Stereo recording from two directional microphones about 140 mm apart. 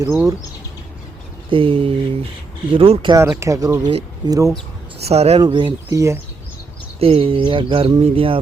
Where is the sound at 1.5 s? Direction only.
40° right (ahead or behind).